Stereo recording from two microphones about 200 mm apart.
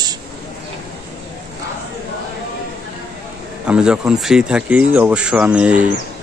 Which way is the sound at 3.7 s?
5° right (ahead or behind).